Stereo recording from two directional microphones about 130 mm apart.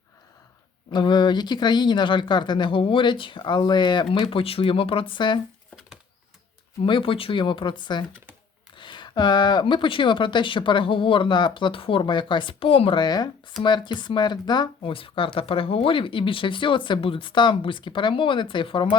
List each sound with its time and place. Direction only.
0.9 s speech: 35° left (ahead or behind)
6.8 s speech: 40° left (ahead or behind)